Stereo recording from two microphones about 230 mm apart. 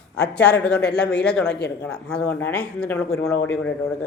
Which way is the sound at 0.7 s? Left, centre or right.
Left.